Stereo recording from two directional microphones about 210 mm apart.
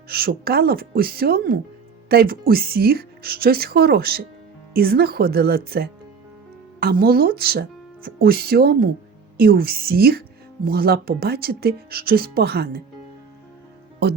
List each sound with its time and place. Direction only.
0.1 s speech: 50° right (ahead or behind)